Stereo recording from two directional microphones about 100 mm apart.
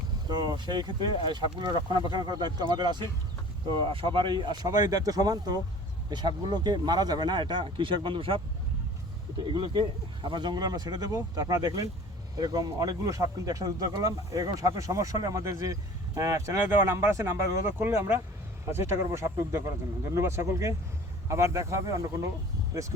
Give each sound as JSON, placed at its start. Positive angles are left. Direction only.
{"t": 0.3, "sound": "speech", "side_deg": -45}
{"t": 3.7, "sound": "speech", "side_deg": -60}
{"t": 9.5, "sound": "speech", "side_deg": -50}